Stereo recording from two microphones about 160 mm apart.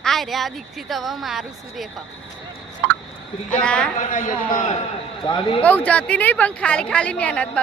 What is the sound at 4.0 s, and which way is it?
Speech, 50° left (ahead or behind).